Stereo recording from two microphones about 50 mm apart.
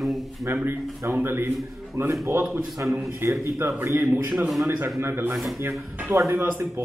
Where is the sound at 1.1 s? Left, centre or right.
Right.